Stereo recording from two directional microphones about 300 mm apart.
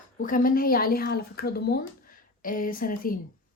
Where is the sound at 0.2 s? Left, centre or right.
Left.